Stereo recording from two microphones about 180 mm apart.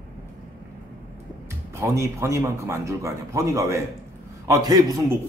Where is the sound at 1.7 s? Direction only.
15° right (ahead or behind).